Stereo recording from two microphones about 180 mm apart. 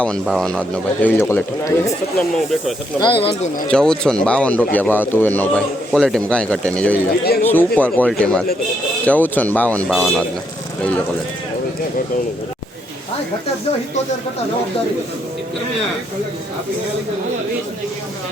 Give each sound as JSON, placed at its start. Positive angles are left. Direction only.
{"t": 0.0, "sound": "speech", "side_deg": 5}
{"t": 1.0, "sound": "a man's voice", "side_deg": 15}
{"t": 2.1, "sound": "speech", "side_deg": 0}
{"t": 3.0, "sound": "speech", "side_deg": 30}
{"t": 3.7, "sound": "a man's voice", "side_deg": 5}